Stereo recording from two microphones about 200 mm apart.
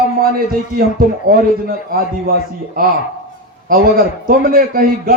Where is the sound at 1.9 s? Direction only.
50° right (ahead or behind).